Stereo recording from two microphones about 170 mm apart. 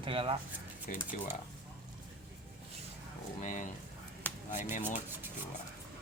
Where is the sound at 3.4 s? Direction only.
50° left (ahead or behind).